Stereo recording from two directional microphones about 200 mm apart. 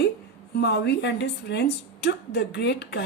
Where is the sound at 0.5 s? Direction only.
60° left (ahead or behind).